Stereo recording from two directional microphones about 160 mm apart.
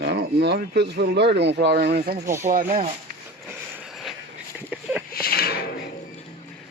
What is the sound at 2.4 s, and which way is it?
Speech, 50° right (ahead or behind).